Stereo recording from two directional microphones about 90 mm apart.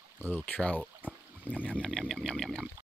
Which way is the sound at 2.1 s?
5° left (ahead or behind).